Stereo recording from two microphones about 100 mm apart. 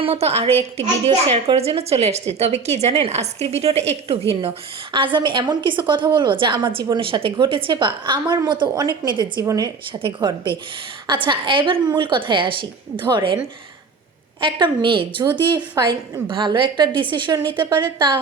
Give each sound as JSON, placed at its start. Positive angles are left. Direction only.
{"t": 0.0, "sound": "a woman's voice", "side_deg": -90}
{"t": 9.4, "sound": "a woman's voice", "side_deg": -40}
{"t": 10.0, "sound": "a woman's voice", "side_deg": -55}
{"t": 14.4, "sound": "a woman's voice", "side_deg": -55}